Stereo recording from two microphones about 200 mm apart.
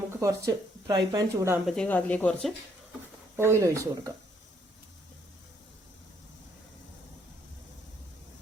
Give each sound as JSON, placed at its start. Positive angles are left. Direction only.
{"t": 0.2, "sound": "speech", "side_deg": -15}
{"t": 1.6, "sound": "speech", "side_deg": 5}
{"t": 3.3, "sound": "speech", "side_deg": -15}